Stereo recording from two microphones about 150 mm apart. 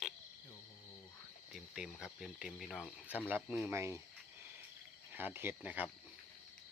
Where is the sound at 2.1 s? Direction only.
Centre (ahead or behind).